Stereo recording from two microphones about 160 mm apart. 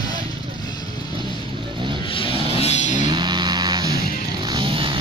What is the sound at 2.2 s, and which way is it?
Music, 40° left (ahead or behind).